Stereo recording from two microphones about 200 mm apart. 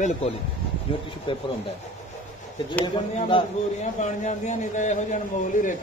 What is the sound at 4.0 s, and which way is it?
A man's voice, 35° left (ahead or behind).